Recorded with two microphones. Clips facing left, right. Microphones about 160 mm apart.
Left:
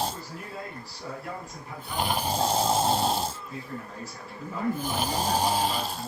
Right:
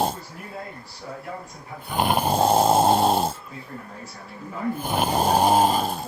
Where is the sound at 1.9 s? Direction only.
55° right (ahead or behind).